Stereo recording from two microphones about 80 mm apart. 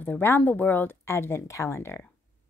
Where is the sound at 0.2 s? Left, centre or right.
Left.